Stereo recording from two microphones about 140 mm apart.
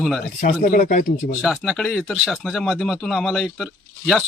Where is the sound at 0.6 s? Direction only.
70° left (ahead or behind).